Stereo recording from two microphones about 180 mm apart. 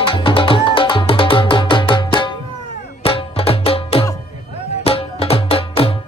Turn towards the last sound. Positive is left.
turn(degrees=30)  # may be behind; listen again after turning